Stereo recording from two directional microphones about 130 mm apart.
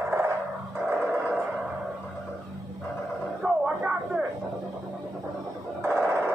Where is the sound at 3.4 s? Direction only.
5° right (ahead or behind).